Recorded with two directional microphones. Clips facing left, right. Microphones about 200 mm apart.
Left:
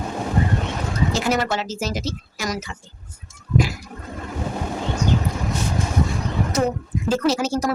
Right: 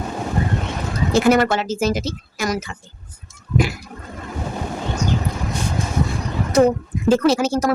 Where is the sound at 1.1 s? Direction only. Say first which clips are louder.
Right 9 dB; 55° right (ahead or behind).